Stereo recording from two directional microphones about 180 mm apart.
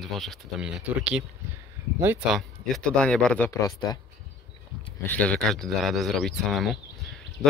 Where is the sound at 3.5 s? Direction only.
20° left (ahead or behind).